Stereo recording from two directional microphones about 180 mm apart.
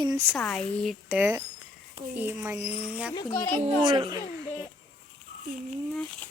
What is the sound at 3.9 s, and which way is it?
Speech, 25° right (ahead or behind).